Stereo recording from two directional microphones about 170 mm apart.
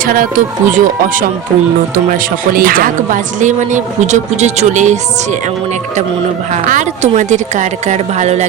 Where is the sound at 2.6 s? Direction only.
55° right (ahead or behind).